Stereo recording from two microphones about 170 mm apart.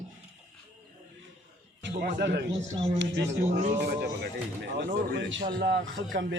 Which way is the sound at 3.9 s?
80° right.